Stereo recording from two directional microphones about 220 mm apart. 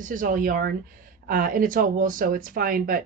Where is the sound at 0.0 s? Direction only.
35° right (ahead or behind).